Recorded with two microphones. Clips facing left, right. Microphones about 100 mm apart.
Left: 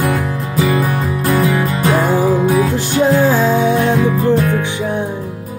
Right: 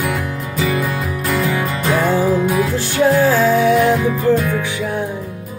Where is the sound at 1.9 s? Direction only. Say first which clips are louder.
Left 1 dB; 15° left (ahead or behind).